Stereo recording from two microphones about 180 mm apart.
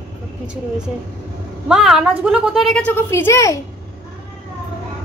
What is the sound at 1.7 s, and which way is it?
A woman's voice, 5° right (ahead or behind).